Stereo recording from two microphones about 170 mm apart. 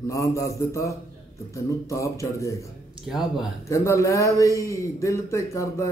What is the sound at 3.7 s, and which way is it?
A man's voice, 15° left (ahead or behind).